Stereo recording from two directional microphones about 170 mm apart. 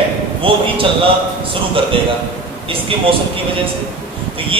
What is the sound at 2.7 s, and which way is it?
Speech, 30° right (ahead or behind).